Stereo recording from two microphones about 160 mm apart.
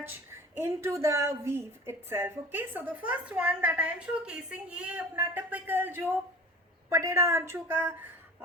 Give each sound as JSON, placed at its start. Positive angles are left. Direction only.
{"t": 0.0, "sound": "a woman's voice", "side_deg": -15}